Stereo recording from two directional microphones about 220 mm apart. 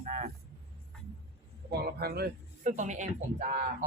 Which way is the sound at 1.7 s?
45° right (ahead or behind).